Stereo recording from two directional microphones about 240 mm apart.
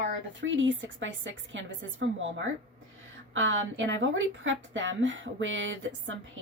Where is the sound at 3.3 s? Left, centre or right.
Right.